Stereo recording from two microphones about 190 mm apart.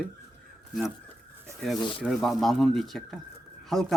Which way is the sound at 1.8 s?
25° left (ahead or behind).